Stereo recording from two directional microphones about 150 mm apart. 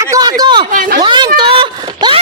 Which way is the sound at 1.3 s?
35° right (ahead or behind).